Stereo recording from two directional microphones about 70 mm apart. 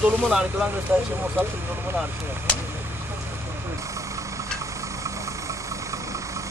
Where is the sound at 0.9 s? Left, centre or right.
Right.